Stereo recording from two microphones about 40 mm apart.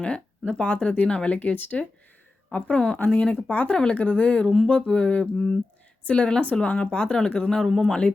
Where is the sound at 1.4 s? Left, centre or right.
Left.